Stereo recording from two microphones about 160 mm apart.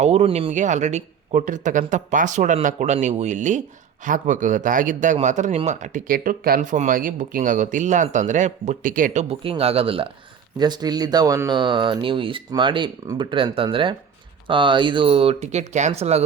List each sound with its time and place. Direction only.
0.0 s speech: 40° right (ahead or behind)
0.5 s speech: 50° right (ahead or behind); by 6.6 s 65° right (ahead or behind)
6.6 s speech: 50° right (ahead or behind)
9.2 s speech: 35° right (ahead or behind)